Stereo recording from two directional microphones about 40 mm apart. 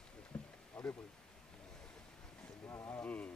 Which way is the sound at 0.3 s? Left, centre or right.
Left.